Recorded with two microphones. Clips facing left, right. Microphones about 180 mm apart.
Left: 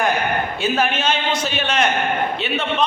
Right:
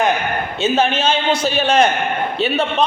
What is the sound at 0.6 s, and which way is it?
A man's voice, 25° right (ahead or behind).